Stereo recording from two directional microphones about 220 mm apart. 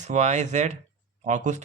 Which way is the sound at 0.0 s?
30° right (ahead or behind).